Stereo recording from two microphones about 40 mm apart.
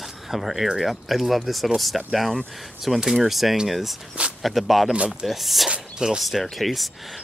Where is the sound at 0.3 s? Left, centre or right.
Centre.